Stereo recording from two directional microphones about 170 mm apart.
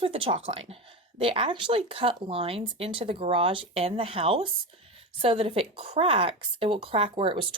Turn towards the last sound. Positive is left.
turn(degrees=-30)  # may be behind; listen again after turning